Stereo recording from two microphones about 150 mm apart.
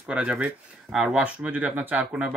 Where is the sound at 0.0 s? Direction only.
5° right (ahead or behind).